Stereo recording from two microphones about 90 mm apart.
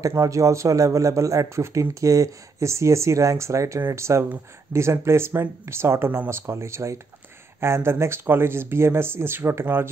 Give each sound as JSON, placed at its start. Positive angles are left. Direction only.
{"t": 0.1, "sound": "a man's voice", "side_deg": -35}